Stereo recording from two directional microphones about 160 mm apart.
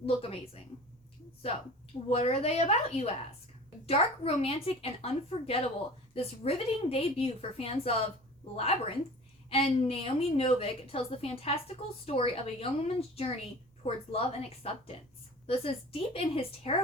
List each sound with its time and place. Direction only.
0.0 s a woman's voice: 35° left (ahead or behind)
2.0 s a woman's voice: 40° left (ahead or behind)